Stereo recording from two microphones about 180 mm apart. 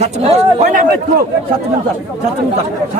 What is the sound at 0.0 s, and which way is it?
Speech, 35° right (ahead or behind).